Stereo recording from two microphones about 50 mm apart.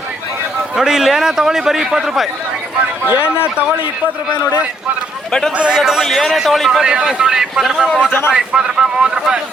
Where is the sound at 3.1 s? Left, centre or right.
Right.